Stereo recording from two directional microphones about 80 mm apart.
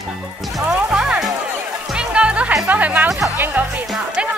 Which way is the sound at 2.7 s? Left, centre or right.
Centre.